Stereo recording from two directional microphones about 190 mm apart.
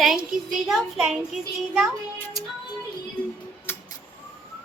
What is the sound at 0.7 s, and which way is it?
Speech, centre (ahead or behind).